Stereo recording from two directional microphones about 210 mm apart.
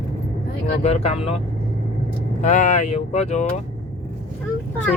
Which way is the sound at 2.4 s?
35° left (ahead or behind).